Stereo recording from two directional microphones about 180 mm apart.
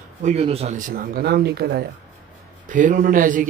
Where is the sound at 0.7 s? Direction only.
50° right (ahead or behind); by 1.8 s 65° right (ahead or behind).